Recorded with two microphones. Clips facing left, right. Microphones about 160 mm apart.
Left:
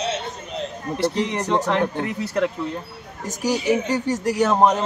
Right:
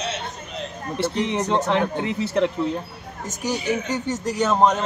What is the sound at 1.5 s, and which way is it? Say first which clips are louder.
Speech: left 2 dB; 20° right (ahead or behind).